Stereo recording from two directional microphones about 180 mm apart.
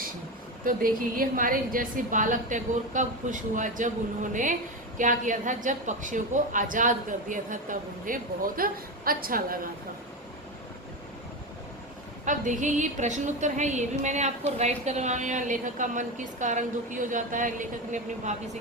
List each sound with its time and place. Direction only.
0.6 s a woman's voice: 50° right (ahead or behind)
12.2 s a woman's voice: 45° right (ahead or behind)